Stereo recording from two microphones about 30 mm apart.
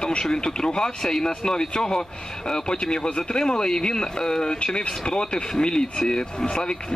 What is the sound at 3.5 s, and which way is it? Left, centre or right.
Speech, centre.